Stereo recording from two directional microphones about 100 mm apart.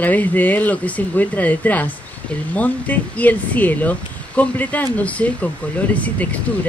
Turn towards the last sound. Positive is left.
turn(degrees=15)  # may be behind; listen again after turning